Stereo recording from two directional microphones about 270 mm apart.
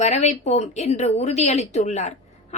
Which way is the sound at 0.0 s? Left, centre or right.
Left.